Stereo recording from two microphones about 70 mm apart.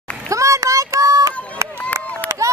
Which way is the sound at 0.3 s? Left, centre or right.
Right.